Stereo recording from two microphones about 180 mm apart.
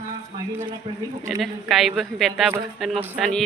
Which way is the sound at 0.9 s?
35° right (ahead or behind).